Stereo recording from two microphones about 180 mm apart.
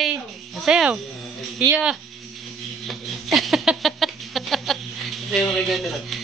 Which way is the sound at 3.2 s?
Centre (ahead or behind).